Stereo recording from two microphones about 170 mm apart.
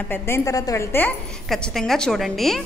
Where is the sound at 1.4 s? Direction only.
Centre (ahead or behind).